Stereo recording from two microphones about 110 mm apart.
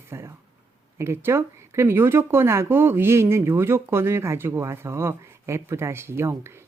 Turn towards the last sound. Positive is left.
turn(degrees=-25)  # may be behind; listen again after turning